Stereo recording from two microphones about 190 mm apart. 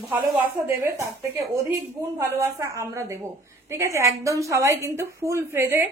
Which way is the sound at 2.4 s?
15° right (ahead or behind).